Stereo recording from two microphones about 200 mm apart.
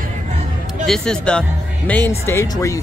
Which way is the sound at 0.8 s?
5° left (ahead or behind).